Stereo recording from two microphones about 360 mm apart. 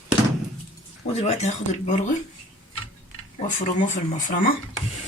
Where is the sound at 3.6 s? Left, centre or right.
Left.